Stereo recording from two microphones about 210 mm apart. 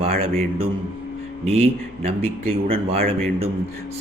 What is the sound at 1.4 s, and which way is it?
Speech, 30° right (ahead or behind).